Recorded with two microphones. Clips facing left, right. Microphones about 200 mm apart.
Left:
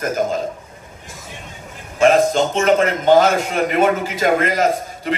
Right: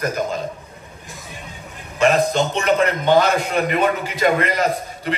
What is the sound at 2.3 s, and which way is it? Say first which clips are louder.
A man's voice: left 3 dB; 45° left (ahead or behind).